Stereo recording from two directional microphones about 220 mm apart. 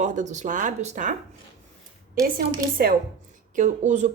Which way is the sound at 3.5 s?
35° right (ahead or behind).